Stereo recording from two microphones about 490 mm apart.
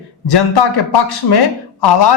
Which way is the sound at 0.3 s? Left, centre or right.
Left.